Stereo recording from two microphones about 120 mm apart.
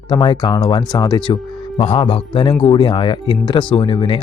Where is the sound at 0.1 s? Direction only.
40° left (ahead or behind).